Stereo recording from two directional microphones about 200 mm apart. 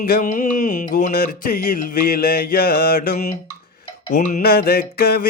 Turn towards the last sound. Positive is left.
turn(degrees=50)  # may be behind; listen again after turning